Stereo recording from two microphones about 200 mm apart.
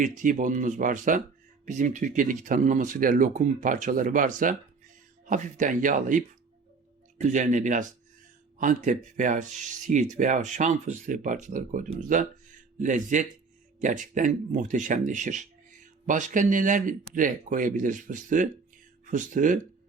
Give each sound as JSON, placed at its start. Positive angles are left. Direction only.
{"t": 0.0, "sound": "speech", "side_deg": -40}